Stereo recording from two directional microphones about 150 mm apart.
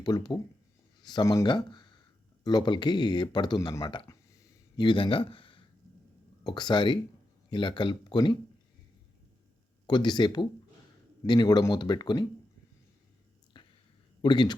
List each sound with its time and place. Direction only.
0.0 s speech: 30° left (ahead or behind)
9.8 s speech: 30° left (ahead or behind)
13.5 s a sound: 30° left (ahead or behind)
14.2 s speech: 30° left (ahead or behind)